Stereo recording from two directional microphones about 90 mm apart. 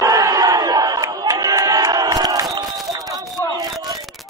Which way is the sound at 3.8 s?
40° right (ahead or behind).